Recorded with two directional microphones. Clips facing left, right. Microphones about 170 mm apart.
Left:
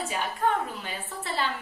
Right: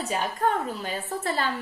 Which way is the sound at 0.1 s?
40° right (ahead or behind).